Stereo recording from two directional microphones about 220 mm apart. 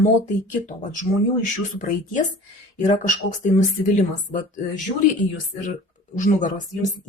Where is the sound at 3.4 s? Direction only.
35° left (ahead or behind).